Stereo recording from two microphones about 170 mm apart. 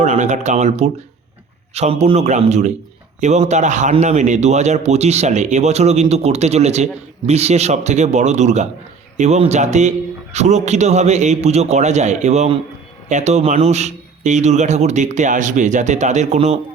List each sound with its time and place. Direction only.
0.0 s a man's voice: 45° right (ahead or behind)